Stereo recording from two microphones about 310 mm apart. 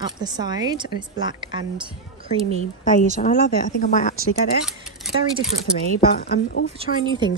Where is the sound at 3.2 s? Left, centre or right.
Left.